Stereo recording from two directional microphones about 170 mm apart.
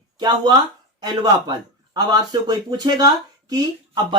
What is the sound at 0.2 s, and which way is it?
Speech, 25° right (ahead or behind).